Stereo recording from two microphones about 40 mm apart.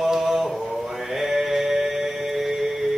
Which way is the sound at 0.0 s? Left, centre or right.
Centre.